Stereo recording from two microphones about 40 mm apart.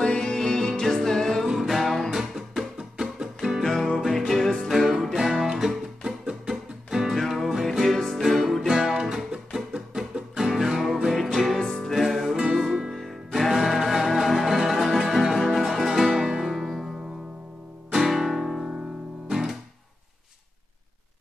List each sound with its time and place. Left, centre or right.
0.0 s music: centre
1.5 s music: centre
2.0 s music: centre
4.6 s music: centre
7.2 s music: centre
11.1 s music: centre
11.9 s music: centre
12.9 s music: centre
17.9 s music: centre
19.2 s guitar: centre